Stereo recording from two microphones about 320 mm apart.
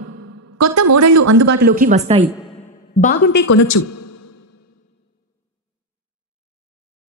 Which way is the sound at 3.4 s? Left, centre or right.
Left.